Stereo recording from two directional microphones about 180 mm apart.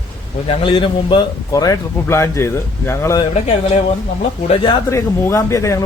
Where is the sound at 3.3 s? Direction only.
40° left (ahead or behind).